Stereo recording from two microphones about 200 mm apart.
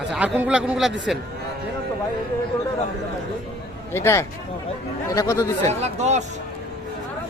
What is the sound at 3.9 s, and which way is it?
Speech, 15° left (ahead or behind).